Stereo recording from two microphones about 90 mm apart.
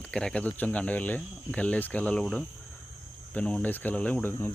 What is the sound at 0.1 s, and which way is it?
Speech, 10° left (ahead or behind).